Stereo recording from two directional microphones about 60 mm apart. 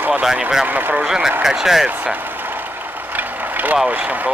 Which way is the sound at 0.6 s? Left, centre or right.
Right.